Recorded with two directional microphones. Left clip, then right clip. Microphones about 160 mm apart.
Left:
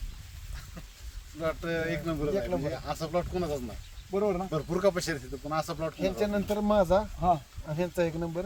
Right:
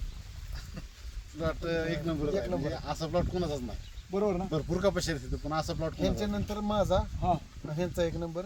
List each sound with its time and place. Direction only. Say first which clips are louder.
1.4 s speech: left 1 dB; 10° right (ahead or behind)
4.1 s speech: left 2 dB; 5° left (ahead or behind)
4.5 s speech: left 2 dB; 10° right (ahead or behind)
6.0 s speech: left 6 dB; 25° right (ahead or behind)
7.2 s speech: left 4 dB; 10° left (ahead or behind)
7.8 s speech: left 2 dB; 25° right (ahead or behind)